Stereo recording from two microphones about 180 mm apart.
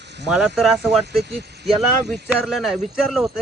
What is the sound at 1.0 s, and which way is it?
Speech, 70° right (ahead or behind).